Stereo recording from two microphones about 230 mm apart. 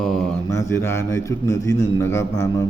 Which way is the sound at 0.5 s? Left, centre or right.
Centre.